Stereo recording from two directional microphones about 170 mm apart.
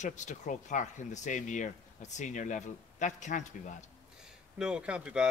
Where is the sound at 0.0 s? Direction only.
45° left (ahead or behind).